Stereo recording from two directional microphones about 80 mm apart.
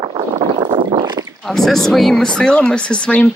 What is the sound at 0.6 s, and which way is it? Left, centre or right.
Boat, right.